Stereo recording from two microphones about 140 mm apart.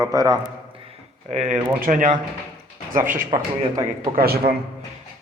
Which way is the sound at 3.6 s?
30° right (ahead or behind).